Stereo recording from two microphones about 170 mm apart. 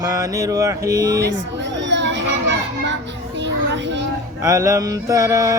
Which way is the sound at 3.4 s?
90° right.